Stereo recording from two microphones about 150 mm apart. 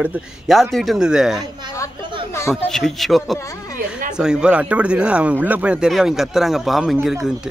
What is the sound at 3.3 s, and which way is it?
Speech, 20° left (ahead or behind).